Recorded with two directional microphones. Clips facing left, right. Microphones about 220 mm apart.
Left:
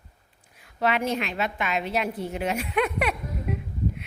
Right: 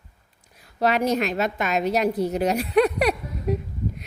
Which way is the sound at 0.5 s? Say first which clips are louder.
Right 3 dB; 40° right (ahead or behind).